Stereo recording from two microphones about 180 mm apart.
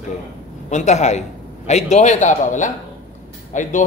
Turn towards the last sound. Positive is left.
turn(degrees=45)  # may be behind; listen again after turning